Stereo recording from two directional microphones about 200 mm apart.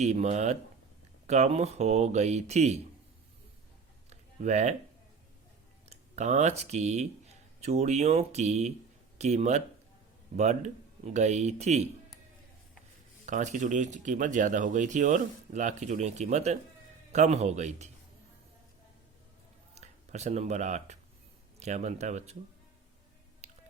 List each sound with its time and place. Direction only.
0.0 s speech: 35° right (ahead or behind)
4.4 s speech: 35° right (ahead or behind)
5.9 s a sound: 35° right (ahead or behind)
6.6 s speech: 35° right (ahead or behind)
13.2 s speech: 40° right (ahead or behind)
19.7 s speech: 35° right (ahead or behind)
23.4 s music: 35° right (ahead or behind)